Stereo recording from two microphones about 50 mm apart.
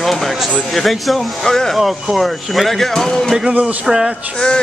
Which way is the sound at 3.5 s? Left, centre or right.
Right.